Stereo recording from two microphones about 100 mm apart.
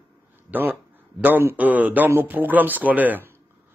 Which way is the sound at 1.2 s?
20° right (ahead or behind).